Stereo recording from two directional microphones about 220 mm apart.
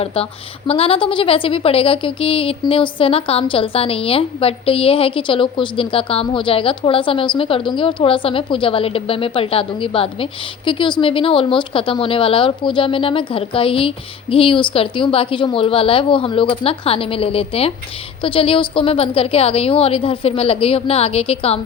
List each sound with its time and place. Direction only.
0.0 s a woman's voice: 25° left (ahead or behind)